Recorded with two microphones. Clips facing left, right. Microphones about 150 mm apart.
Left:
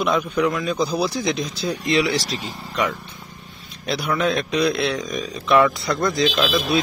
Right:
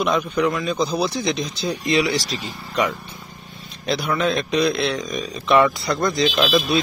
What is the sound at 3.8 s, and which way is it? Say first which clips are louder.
Speech: even; 10° left (ahead or behind).